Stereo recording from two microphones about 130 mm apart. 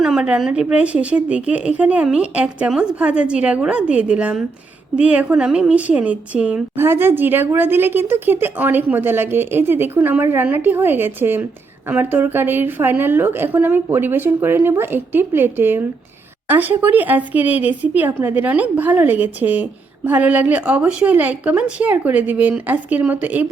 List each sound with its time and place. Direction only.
0.0 s a woman's voice: 5° right (ahead or behind)